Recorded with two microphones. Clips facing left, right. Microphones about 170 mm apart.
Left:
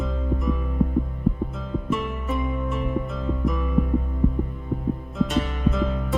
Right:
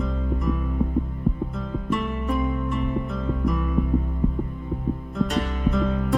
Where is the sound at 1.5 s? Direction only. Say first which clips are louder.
Even; centre (ahead or behind).